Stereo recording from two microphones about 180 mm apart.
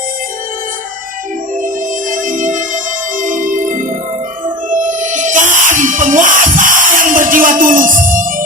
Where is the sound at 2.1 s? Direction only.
45° right (ahead or behind).